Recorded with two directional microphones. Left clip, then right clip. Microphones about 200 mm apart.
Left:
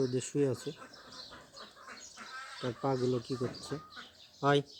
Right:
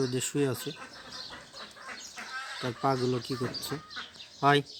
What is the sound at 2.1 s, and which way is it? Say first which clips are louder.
Bird: right 7 dB; 20° right (ahead or behind).